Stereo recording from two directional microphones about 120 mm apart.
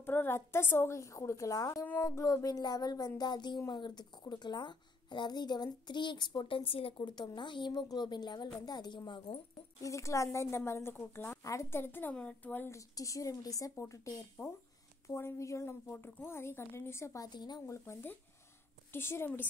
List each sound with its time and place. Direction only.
0.0 s a woman's voice: 20° left (ahead or behind); by 9.4 s 40° left (ahead or behind)
9.8 s a woman's voice: 25° left (ahead or behind)
17.3 s a woman's voice: 35° left (ahead or behind); by 19.4 s 20° left (ahead or behind)